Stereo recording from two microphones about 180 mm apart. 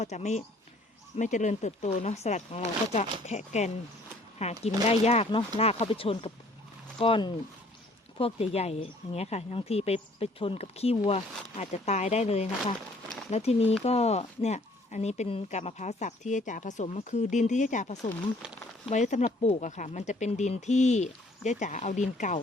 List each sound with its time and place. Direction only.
0.0 s speech: 40° left (ahead or behind)